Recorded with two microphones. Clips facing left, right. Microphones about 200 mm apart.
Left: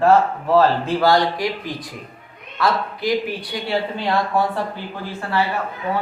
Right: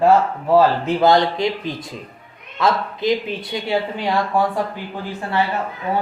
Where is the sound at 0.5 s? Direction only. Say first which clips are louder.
Right 1 dB; 20° right (ahead or behind).